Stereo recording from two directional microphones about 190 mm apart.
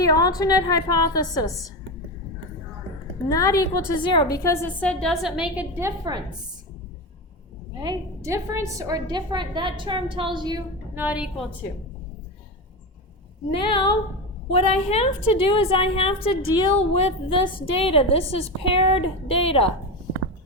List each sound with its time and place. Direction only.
0.0 s a woman's voice: 20° left (ahead or behind)
3.2 s a woman's voice: 20° left (ahead or behind); by 5.9 s 10° right (ahead or behind)
7.8 s a woman's voice: 20° right (ahead or behind)
10.9 s a woman's voice: 5° right (ahead or behind)
13.5 s a woman's voice: 25° left (ahead or behind)